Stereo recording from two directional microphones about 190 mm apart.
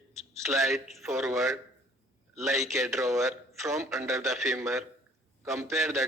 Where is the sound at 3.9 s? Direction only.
15° right (ahead or behind).